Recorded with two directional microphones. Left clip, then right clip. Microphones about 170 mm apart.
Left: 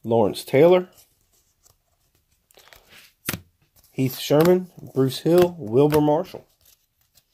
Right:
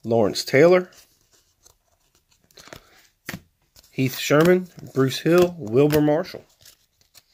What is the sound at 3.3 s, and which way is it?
Chopping, 90° left.